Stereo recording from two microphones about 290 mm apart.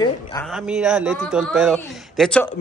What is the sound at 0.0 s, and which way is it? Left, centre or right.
Speech, centre.